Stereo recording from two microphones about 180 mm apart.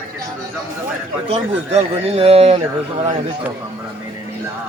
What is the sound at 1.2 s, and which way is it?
Speech, 35° right (ahead or behind).